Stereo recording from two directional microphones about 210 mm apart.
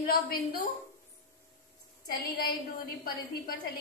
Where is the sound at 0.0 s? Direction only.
45° left (ahead or behind).